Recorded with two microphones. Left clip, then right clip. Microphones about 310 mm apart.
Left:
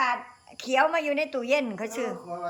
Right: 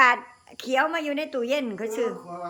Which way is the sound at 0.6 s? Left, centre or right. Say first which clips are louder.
Left 1 dB; centre.